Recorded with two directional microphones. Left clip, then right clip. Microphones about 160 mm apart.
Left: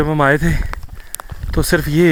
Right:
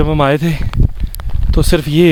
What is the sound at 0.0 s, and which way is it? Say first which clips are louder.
Speech: right 1 dB; 25° right (ahead or behind).